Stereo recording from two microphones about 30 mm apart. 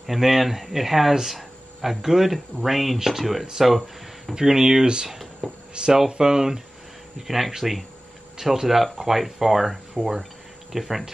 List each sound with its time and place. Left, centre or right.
0.0 s speech: centre
1.3 s a sound: centre
2.0 s speech: centre
4.4 s speech: right
5.4 s speech: centre
6.0 s speech: right
7.2 s speech: centre